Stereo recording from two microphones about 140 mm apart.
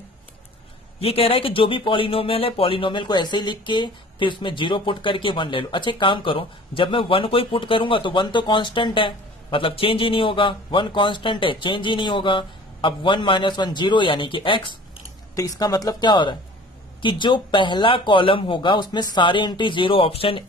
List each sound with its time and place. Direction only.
1.0 s speech: 45° left (ahead or behind)
15.3 s speech: 25° left (ahead or behind); by 20.4 s 40° left (ahead or behind)